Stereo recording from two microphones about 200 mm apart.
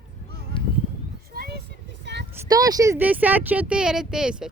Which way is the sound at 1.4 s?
50° right (ahead or behind).